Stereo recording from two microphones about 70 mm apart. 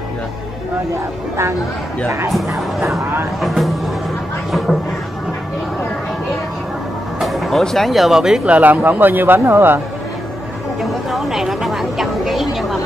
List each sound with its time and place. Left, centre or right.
2.0 s speech: right
3.3 s speech: centre
4.5 s a sound: centre
7.2 s speech: centre
8.5 s speech: right
10.8 s speech: centre